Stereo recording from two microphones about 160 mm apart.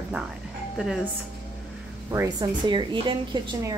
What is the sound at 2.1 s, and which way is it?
A woman's voice, 25° right (ahead or behind).